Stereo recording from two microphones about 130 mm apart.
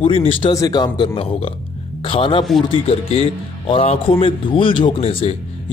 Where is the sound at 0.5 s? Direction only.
30° left (ahead or behind).